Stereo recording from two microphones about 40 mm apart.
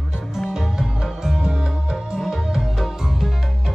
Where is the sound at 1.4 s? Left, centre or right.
Centre.